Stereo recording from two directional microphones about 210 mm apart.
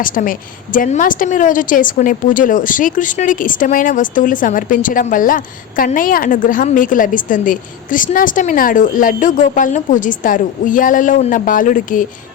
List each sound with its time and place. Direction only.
0.0 s a woman's voice: 40° left (ahead or behind)